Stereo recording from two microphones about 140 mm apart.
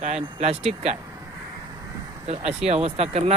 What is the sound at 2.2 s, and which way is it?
Speech, 50° right (ahead or behind).